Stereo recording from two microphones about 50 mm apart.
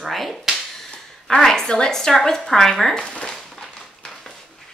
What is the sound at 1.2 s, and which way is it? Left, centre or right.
A woman's voice, centre.